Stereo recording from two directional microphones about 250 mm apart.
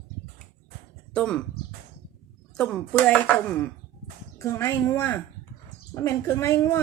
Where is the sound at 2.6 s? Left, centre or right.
Centre.